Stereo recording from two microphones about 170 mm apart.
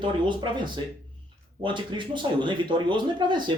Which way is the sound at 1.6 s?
30° right (ahead or behind).